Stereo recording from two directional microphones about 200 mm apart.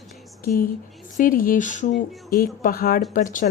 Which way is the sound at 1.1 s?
45° left (ahead or behind).